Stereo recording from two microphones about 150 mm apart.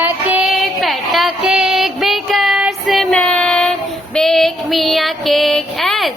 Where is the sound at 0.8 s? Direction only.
Centre (ahead or behind).